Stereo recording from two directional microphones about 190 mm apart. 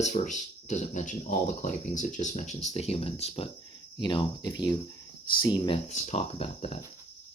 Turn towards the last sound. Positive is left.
turn(degrees=30)  # may be behind; listen again after turning